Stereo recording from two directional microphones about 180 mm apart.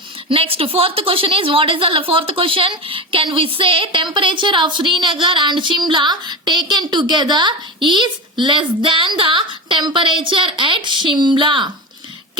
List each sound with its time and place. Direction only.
0.3 s a woman's voice: 30° right (ahead or behind)